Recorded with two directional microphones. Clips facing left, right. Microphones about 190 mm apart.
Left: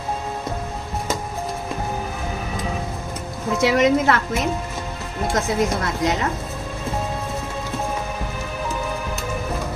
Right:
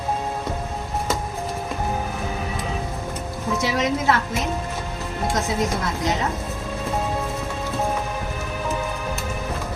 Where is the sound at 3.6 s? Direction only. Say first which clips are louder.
Left 7 dB; 60° left (ahead or behind).